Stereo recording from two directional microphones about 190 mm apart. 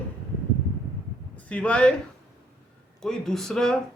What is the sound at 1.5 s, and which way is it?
Speech, 5° left (ahead or behind).